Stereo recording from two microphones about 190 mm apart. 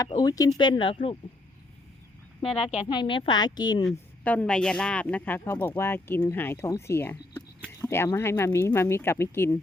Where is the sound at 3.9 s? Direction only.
5° left (ahead or behind).